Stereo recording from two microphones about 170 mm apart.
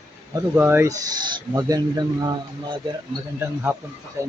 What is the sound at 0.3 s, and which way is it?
Speech, 10° right (ahead or behind).